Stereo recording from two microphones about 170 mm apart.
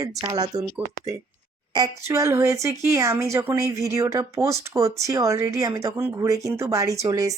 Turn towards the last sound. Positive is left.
turn(degrees=-20)  # may be behind; listen again after turning